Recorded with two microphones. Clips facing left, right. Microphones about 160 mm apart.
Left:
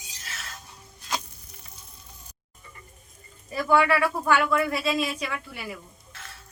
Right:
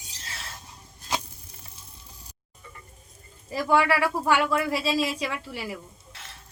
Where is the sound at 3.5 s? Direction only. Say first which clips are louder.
Left 1 dB; 30° right (ahead or behind).